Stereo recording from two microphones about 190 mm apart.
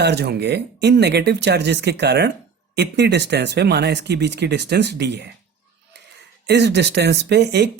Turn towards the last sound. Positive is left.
turn(degrees=-65)  # may be behind; listen again after turning